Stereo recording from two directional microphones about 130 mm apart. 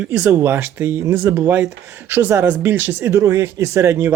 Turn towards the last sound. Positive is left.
turn(degrees=-20)  # may be behind; listen again after turning